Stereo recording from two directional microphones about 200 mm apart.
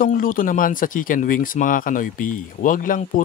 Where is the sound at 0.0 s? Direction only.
45° left (ahead or behind).